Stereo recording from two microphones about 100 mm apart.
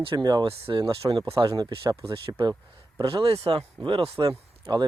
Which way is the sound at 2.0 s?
55° right (ahead or behind).